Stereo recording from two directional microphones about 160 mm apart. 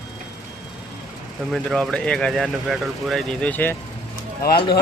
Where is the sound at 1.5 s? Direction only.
Centre (ahead or behind).